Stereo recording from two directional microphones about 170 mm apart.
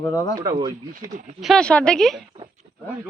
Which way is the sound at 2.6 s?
50° right (ahead or behind).